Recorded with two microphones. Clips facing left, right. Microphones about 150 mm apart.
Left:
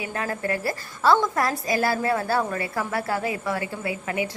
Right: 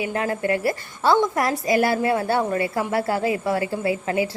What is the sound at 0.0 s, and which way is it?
A woman's voice, 25° right (ahead or behind).